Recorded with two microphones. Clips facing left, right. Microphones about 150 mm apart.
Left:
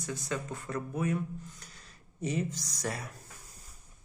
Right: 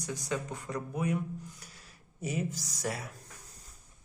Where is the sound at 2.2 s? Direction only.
10° right (ahead or behind).